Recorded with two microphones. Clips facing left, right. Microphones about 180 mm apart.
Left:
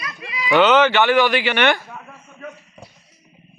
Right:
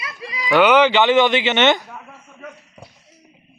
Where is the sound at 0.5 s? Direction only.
10° right (ahead or behind).